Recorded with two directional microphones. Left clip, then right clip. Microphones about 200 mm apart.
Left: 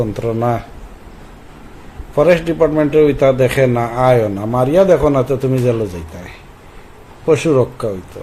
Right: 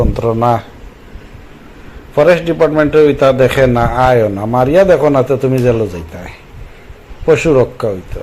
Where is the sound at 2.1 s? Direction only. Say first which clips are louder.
Right 3 dB; 5° right (ahead or behind).